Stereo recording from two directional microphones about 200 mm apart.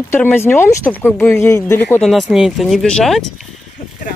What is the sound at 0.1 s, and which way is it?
Speech, 10° left (ahead or behind).